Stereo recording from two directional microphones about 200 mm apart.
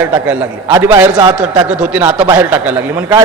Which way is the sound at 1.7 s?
5° right (ahead or behind).